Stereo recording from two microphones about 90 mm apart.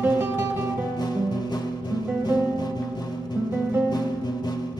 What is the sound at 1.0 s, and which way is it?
Music, 50° left (ahead or behind).